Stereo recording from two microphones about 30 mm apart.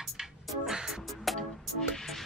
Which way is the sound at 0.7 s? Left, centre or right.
Centre.